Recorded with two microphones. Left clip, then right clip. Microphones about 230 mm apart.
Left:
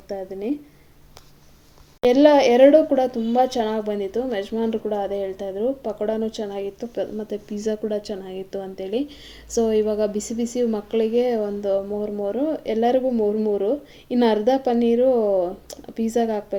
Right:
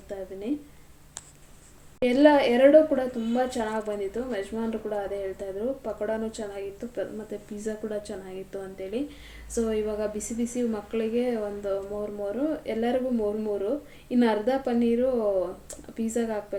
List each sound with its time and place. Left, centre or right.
0.1 s a woman's voice: left
2.0 s a woman's voice: left